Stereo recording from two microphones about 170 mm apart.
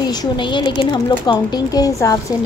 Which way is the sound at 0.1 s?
25° left (ahead or behind).